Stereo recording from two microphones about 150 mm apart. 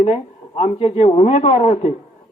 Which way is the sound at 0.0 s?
45° left (ahead or behind).